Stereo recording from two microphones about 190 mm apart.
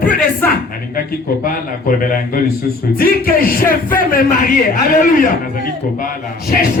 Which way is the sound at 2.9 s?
50° left (ahead or behind).